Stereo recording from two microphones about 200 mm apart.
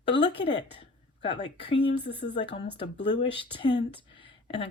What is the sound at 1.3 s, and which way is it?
Speech, 25° left (ahead or behind).